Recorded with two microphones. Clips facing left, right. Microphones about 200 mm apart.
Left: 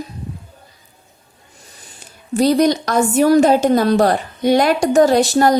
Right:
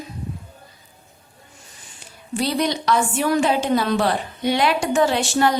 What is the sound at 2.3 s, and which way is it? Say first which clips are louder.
A woman's voice: left 8 dB; 40° left (ahead or behind).